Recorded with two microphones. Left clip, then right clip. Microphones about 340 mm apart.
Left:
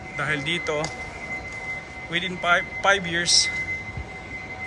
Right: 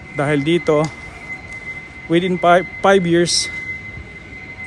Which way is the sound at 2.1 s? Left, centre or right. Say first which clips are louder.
Right 9 dB; centre.